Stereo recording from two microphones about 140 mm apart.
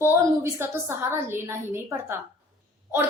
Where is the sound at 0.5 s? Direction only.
15° right (ahead or behind).